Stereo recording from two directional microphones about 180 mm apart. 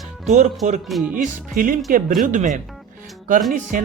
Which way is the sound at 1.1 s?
50° right (ahead or behind).